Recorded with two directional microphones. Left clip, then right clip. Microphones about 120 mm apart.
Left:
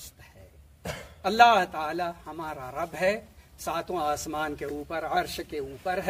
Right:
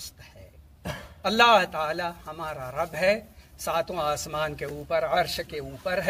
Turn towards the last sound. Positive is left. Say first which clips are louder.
# right 1 dB
turn(degrees=25)  # may be behind; listen again after turning